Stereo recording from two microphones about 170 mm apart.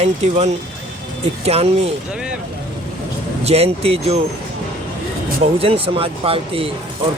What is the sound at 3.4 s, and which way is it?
Speech, 35° right (ahead or behind).